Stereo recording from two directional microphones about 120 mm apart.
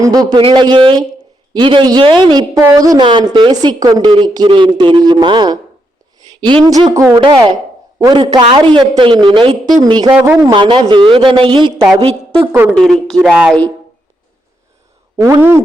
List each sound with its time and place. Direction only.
0.0 s a man's voice: 30° right (ahead or behind)
2.6 s speech: 25° right (ahead or behind)
3.0 s a woman's voice: 45° right (ahead or behind)
6.7 s speech: 30° right (ahead or behind)
7.2 s a man's voice: 40° right (ahead or behind)
9.7 s a man's voice: 35° right (ahead or behind)
12.5 s a woman's voice: 15° right (ahead or behind)
12.7 s speech: 5° left (ahead or behind)
15.2 s speech: 20° right (ahead or behind)